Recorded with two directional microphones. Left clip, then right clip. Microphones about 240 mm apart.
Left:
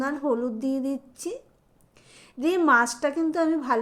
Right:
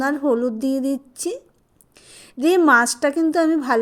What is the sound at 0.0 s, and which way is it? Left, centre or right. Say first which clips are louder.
A woman's voice: right 6 dB; right.